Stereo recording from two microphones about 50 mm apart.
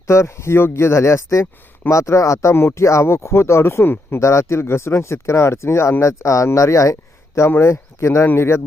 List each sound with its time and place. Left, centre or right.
0.1 s speech: left
0.7 s speech: left
4.3 s speech: left
4.6 s speech: left
7.5 s speech: left
8.4 s speech: left